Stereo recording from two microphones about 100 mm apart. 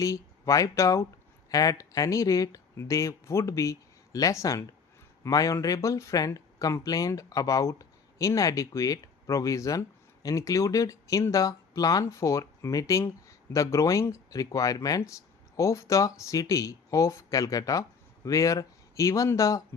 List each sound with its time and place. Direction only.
0.0 s speech: 30° left (ahead or behind)